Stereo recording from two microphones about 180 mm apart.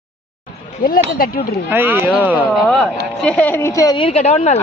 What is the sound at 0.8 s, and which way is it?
Speech, 50° left (ahead or behind).